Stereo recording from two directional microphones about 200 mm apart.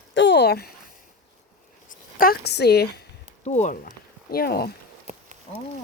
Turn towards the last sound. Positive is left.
turn(degrees=50)  # may be behind; listen again after turning